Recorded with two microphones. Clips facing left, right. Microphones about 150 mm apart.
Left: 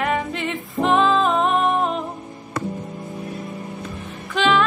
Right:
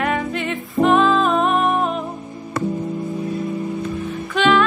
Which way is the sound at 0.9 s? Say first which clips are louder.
Left 1 dB; 25° left (ahead or behind).